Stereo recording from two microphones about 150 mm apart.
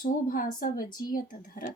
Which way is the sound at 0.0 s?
70° left (ahead or behind).